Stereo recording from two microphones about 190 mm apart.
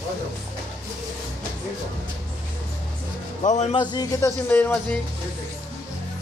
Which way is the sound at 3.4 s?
35° left (ahead or behind).